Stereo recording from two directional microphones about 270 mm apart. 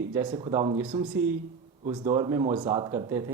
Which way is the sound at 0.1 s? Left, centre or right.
Centre.